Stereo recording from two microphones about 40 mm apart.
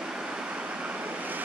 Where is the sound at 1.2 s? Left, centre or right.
Right.